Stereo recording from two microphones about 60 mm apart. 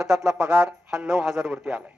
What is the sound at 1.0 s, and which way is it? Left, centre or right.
Speech, centre.